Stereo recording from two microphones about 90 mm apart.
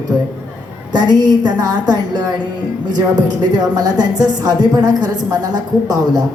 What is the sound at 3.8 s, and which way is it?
A woman's voice, 45° right (ahead or behind).